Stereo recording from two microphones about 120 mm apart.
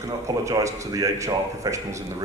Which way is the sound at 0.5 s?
30° right (ahead or behind).